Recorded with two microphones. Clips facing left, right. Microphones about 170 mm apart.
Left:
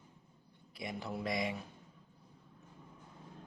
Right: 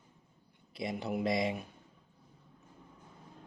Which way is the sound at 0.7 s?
25° right (ahead or behind).